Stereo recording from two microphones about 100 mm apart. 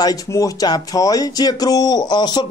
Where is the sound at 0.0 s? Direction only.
35° left (ahead or behind).